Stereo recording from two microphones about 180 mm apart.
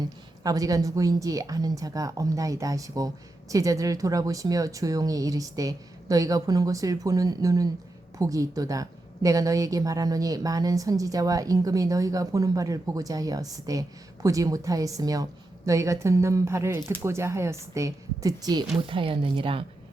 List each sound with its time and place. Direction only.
0.4 s a woman's voice: 20° right (ahead or behind)